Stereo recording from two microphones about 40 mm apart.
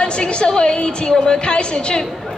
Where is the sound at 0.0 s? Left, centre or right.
Left.